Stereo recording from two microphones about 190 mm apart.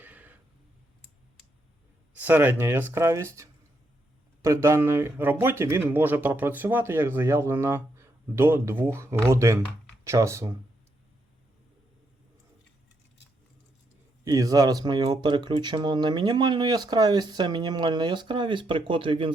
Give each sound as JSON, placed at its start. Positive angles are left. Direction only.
{"t": 0.0, "sound": "a sound", "side_deg": -10}
{"t": 2.1, "sound": "speech", "side_deg": -10}
{"t": 4.4, "sound": "speech", "side_deg": -15}
{"t": 14.3, "sound": "speech", "side_deg": -20}